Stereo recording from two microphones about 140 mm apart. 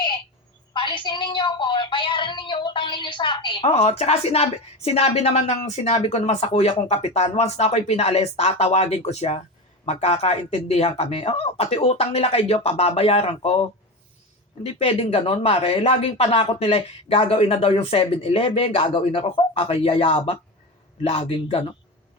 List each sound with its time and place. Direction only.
0.7 s a woman's voice: 35° left (ahead or behind)